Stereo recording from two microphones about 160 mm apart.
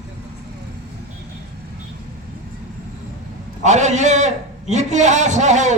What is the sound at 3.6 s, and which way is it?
A man's voice, 45° right (ahead or behind).